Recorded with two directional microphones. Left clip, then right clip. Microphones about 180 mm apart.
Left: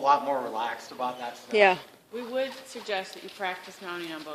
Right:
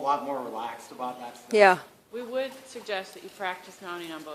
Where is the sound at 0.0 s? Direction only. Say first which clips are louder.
Left 4 dB; 5° right (ahead or behind).